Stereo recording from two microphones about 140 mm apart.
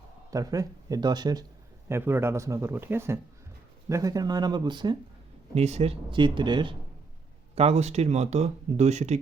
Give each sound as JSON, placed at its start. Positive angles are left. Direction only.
{"t": 0.3, "sound": "a man's voice", "side_deg": -25}
{"t": 1.9, "sound": "a man's voice", "side_deg": -15}
{"t": 5.5, "sound": "speech", "side_deg": -50}
{"t": 7.5, "sound": "speech", "side_deg": -45}